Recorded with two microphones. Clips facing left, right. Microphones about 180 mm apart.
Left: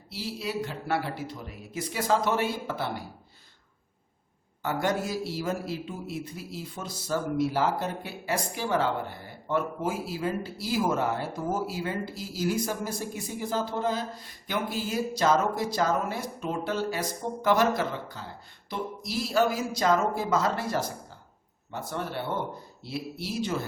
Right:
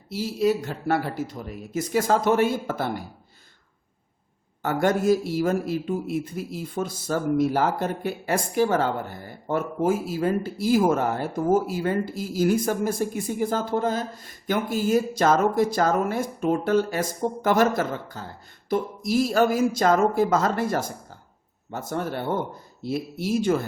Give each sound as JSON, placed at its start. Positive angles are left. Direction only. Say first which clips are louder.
{"t": 0.1, "sound": "a man's voice", "louder": "right 10 dB", "side_deg": -45}
{"t": 4.6, "sound": "a man's voice", "louder": "right 7 dB", "side_deg": -50}